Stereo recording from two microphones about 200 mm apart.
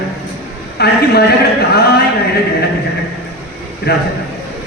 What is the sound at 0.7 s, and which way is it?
Speech, 55° left (ahead or behind).